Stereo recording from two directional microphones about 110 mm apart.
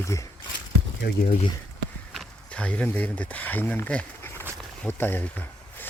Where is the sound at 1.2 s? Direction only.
60° left (ahead or behind).